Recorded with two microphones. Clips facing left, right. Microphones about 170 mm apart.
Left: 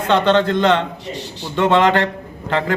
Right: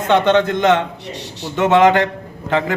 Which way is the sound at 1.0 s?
70° right (ahead or behind).